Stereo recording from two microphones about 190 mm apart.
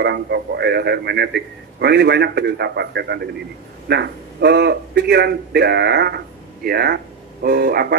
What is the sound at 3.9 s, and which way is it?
A man's voice, 60° right (ahead or behind).